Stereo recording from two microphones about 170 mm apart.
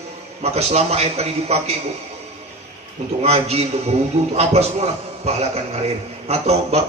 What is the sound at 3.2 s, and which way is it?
A man's voice, 40° right (ahead or behind).